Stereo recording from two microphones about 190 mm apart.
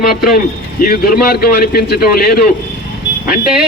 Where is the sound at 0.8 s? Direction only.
50° left (ahead or behind).